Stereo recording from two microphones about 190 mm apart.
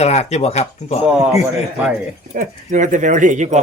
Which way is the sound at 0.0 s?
35° left (ahead or behind).